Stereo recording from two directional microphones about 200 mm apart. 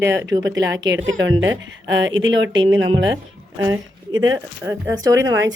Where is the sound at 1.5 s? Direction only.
70° right (ahead or behind).